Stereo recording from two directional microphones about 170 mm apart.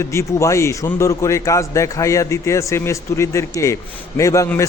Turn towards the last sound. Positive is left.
turn(degrees=20)  # may be behind; listen again after turning